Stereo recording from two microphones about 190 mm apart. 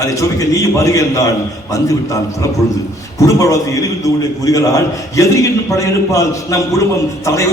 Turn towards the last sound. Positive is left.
turn(degrees=15)  # may be behind; listen again after turning